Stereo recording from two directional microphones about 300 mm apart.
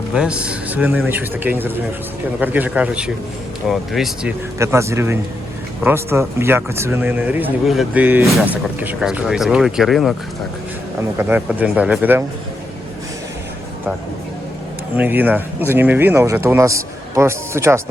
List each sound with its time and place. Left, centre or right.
0.1 s speech: centre
11.2 s speech: centre
14.9 s speech: centre